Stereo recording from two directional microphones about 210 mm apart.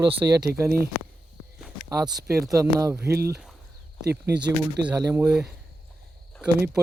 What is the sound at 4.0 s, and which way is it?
Speech, 50° right (ahead or behind).